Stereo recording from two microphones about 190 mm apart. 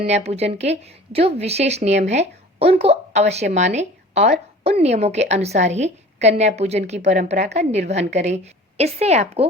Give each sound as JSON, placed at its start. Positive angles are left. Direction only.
{"t": 0.0, "sound": "a woman's voice", "side_deg": -35}